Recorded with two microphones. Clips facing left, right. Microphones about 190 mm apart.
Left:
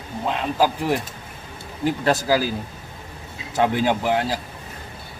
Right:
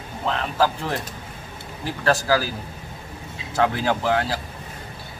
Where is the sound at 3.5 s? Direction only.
15° left (ahead or behind).